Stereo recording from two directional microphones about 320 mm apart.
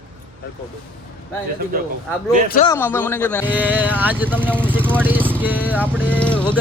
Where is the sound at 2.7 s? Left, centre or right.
Centre.